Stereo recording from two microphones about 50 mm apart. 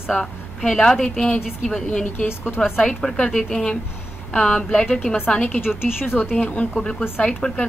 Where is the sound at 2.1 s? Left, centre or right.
Left.